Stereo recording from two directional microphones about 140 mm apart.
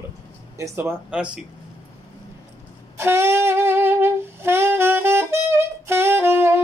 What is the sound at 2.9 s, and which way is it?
Wind instrument, 20° right (ahead or behind).